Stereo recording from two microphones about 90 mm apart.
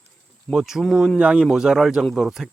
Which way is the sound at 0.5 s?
5° right (ahead or behind).